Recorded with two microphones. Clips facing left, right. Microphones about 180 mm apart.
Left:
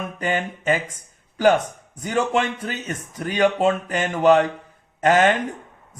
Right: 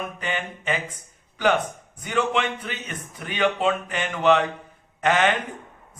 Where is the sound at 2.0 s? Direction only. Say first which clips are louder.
Left 3 dB; 40° left (ahead or behind).